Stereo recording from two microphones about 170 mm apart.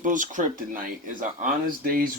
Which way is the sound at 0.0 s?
50° right (ahead or behind).